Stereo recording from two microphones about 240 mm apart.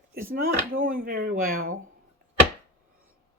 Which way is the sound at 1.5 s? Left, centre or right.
Right.